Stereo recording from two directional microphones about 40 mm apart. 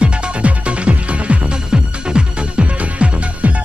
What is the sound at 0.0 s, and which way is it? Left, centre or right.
Music, right.